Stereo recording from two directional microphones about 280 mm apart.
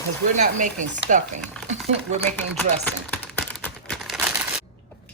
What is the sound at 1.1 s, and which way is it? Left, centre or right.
Speech, right.